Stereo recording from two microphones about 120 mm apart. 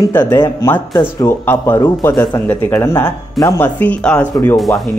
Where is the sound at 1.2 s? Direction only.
20° left (ahead or behind).